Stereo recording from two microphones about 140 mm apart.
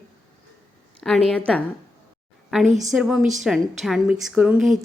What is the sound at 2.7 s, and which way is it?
Speech, 60° right (ahead or behind).